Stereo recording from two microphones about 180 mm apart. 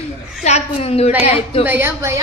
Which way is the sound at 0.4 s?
35° left (ahead or behind).